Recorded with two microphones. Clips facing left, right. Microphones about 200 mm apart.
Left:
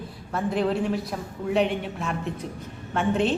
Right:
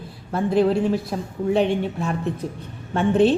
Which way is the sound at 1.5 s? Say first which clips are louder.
Right 4 dB; 35° right (ahead or behind).